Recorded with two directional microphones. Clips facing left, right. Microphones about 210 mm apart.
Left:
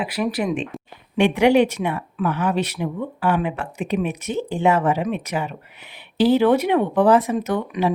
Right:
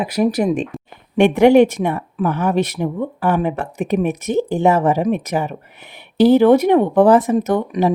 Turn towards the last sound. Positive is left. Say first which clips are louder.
# right 5 dB
turn(degrees=-45)  # may be behind; listen again after turning